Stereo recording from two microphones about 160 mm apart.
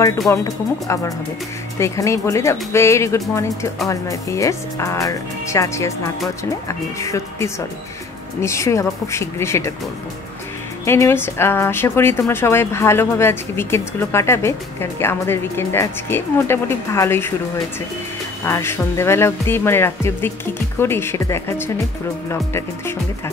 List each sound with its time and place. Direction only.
0.3 s speech: 20° left (ahead or behind)
10.9 s speech: 15° left (ahead or behind)
18.4 s speech: 15° left (ahead or behind)